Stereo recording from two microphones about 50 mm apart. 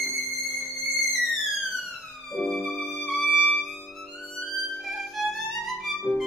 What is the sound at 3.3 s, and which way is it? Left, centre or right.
Music, left.